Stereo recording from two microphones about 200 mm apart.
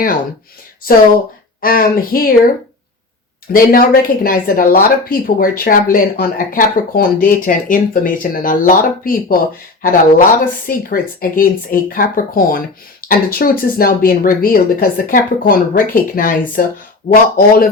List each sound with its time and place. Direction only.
0.8 s speech: 45° left (ahead or behind)
3.5 s speech: 45° left (ahead or behind)